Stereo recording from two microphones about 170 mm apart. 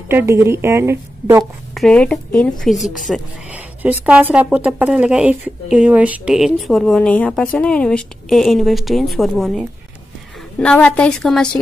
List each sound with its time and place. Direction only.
0.1 s a woman's voice: 15° right (ahead or behind)
1.4 s speech: 5° left (ahead or behind)